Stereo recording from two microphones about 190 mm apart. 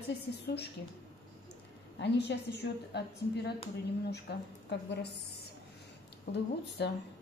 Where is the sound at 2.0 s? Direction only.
60° left (ahead or behind).